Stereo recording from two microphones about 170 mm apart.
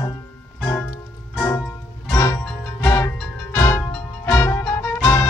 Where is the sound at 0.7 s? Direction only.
10° left (ahead or behind).